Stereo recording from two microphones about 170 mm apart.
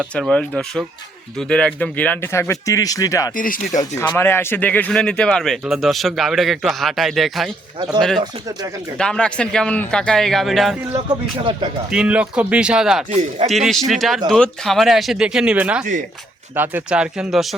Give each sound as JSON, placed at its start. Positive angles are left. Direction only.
{"t": 0.1, "sound": "speech", "side_deg": 5}
{"t": 3.3, "sound": "speech", "side_deg": 55}
{"t": 3.8, "sound": "speech", "side_deg": 15}
{"t": 8.2, "sound": "speech", "side_deg": -25}
{"t": 9.0, "sound": "speech", "side_deg": 5}
{"t": 10.9, "sound": "speech", "side_deg": -30}
{"t": 11.9, "sound": "speech", "side_deg": -5}
{"t": 13.1, "sound": "speech", "side_deg": -40}
{"t": 13.5, "sound": "speech", "side_deg": 0}